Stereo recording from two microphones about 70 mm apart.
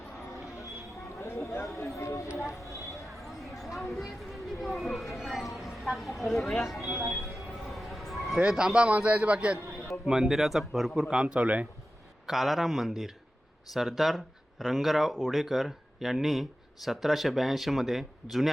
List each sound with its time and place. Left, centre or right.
1.1 s a sound: left
2.5 s speech: left
3.1 s a sound: centre
4.6 s speech: centre
6.9 s a man's voice: centre
7.4 s a sound: centre
8.5 s a man's voice: centre
10.1 s a man's voice: centre
12.2 s speech: centre